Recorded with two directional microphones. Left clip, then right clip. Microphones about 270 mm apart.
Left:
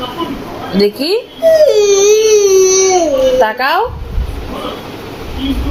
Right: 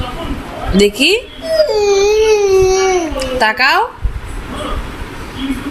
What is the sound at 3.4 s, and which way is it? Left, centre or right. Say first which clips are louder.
Speech: even; right.